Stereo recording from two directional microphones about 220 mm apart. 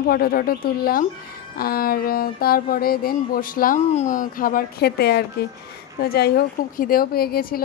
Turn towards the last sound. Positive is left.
turn(degrees=45)  # may be behind; listen again after turning